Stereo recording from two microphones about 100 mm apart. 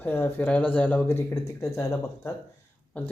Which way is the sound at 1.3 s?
35° left (ahead or behind).